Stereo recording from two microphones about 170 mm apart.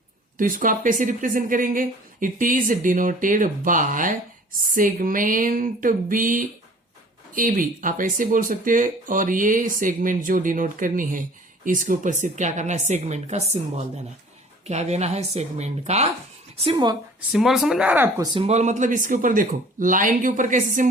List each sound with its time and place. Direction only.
0.3 s speech: 50° right (ahead or behind)
16.6 s a woman's voice: 25° right (ahead or behind)
17.2 s speech: centre (ahead or behind)
18.3 s speech: 40° right (ahead or behind)